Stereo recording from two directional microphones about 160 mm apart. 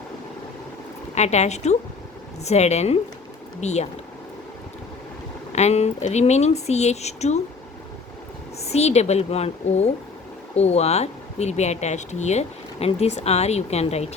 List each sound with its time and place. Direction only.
1.1 s speech: 45° left (ahead or behind)
5.5 s speech: 45° left (ahead or behind)
8.5 s speech: 40° left (ahead or behind)